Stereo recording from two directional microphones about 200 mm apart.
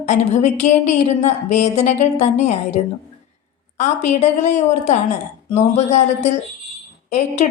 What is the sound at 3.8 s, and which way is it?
A woman's voice, 35° left (ahead or behind).